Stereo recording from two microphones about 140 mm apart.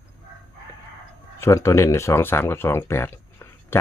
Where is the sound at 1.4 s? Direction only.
20° left (ahead or behind).